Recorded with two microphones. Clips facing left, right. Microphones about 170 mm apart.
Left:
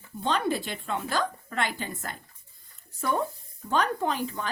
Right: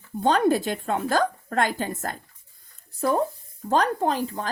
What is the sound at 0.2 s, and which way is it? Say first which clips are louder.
A woman's voice: right 7 dB; 45° right (ahead or behind).